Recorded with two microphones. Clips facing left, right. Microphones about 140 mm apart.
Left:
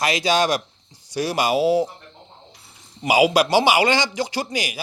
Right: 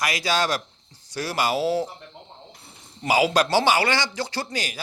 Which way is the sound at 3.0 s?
15° left (ahead or behind).